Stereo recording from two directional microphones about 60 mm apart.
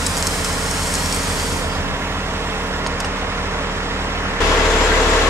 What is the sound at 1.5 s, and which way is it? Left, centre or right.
Vehicle, right.